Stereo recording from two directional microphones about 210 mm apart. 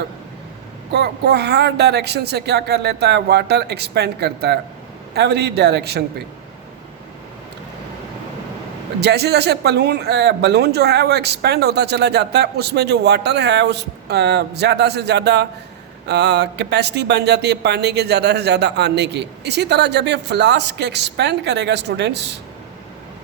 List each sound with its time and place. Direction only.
0.9 s speech: 50° right (ahead or behind)
9.0 s speech: 50° right (ahead or behind)